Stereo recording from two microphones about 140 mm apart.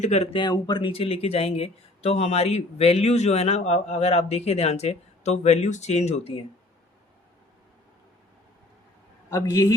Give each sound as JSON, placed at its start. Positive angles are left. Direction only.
{"t": 0.0, "sound": "speech", "side_deg": 55}
{"t": 0.3, "sound": "speech", "side_deg": 30}
{"t": 9.3, "sound": "a man's voice", "side_deg": 25}